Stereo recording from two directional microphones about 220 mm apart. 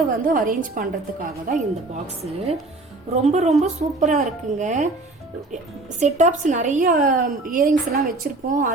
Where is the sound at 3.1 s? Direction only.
30° right (ahead or behind).